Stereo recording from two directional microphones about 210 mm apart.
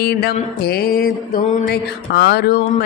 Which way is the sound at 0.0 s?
50° left (ahead or behind).